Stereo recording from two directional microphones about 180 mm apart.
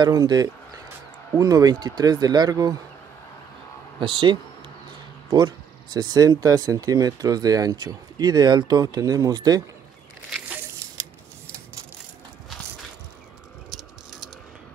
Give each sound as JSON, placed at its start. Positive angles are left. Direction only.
{"t": 0.0, "sound": "speech", "side_deg": -20}
{"t": 4.0, "sound": "speech", "side_deg": -30}
{"t": 5.9, "sound": "speech", "side_deg": -20}
{"t": 13.7, "sound": "a sound", "side_deg": -5}